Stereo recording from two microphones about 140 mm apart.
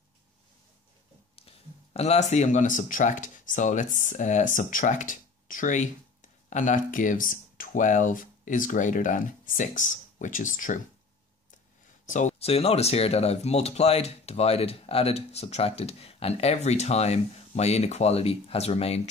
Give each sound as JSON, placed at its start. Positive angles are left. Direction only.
{"t": 2.0, "sound": "speech", "side_deg": 50}
{"t": 12.1, "sound": "speech", "side_deg": 60}